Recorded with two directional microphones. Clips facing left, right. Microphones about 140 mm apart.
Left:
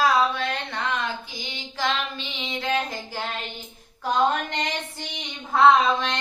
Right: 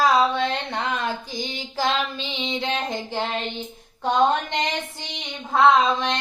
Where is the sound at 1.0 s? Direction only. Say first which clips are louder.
Right 4 dB; 40° right (ahead or behind).